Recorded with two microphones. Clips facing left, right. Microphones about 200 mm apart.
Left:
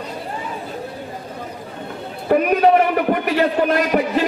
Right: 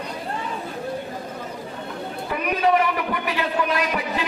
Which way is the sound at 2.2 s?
45° left (ahead or behind).